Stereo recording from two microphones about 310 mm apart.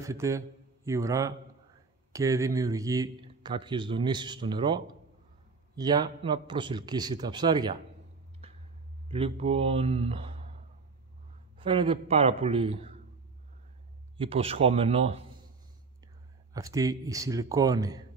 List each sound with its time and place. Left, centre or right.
0.0 s speech: centre
9.1 s speech: centre
11.5 s speech: centre
14.1 s a man's voice: centre
16.5 s speech: centre